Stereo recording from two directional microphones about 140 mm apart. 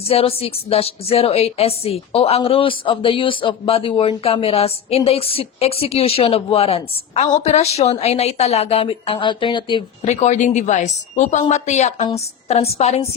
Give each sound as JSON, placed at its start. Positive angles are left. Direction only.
{"t": 0.1, "sound": "a woman's voice", "side_deg": 45}
{"t": 10.0, "sound": "a woman's voice", "side_deg": 50}